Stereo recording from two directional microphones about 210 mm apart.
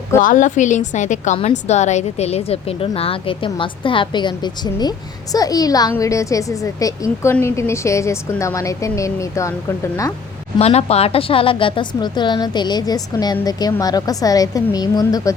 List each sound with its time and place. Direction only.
0.2 s a woman's voice: 40° left (ahead or behind); by 10.1 s 15° left (ahead or behind)
10.6 s a woman's voice: 30° left (ahead or behind)